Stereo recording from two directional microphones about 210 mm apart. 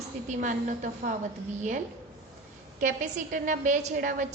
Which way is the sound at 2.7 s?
40° right (ahead or behind).